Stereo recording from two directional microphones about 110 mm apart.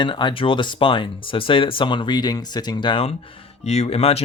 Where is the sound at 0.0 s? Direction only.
45° left (ahead or behind).